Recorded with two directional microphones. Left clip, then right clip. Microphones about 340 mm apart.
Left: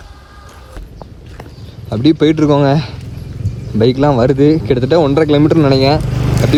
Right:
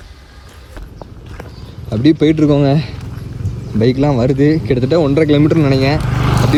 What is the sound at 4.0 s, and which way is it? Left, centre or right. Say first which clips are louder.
Speech: left 4 dB; left.